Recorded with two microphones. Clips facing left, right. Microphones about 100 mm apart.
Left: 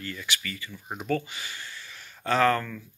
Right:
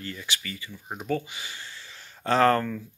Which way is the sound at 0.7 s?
5° right (ahead or behind).